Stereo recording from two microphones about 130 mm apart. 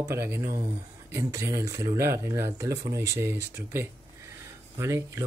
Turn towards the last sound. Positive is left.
turn(degrees=-20)  # may be behind; listen again after turning